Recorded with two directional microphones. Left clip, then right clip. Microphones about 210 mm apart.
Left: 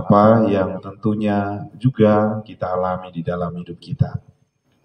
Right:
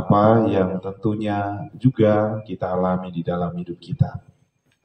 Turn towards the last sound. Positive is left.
turn(degrees=50)  # may be behind; listen again after turning